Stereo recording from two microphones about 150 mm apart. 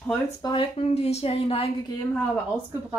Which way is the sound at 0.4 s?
35° left (ahead or behind).